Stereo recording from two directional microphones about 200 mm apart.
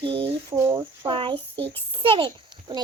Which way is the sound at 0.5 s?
15° right (ahead or behind).